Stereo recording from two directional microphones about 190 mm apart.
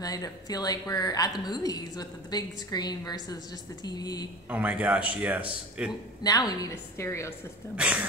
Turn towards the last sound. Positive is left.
turn(degrees=-5)  # may be behind; listen again after turning